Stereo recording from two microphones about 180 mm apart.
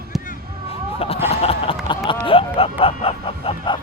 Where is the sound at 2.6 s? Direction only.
30° left (ahead or behind).